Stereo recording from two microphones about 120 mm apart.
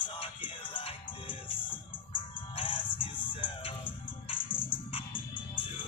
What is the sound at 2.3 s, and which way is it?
Music, 45° left (ahead or behind).